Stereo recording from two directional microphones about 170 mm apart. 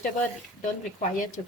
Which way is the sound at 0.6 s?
50° left (ahead or behind).